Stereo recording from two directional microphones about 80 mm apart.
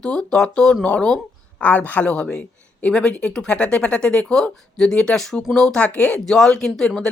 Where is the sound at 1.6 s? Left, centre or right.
Left.